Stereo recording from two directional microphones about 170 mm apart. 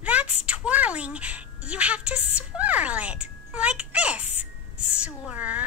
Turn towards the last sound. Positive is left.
turn(degrees=-10)  # may be behind; listen again after turning